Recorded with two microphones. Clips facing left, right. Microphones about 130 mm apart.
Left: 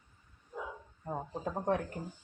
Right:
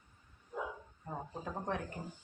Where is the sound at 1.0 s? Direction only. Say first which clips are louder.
Left 5 dB; 25° left (ahead or behind).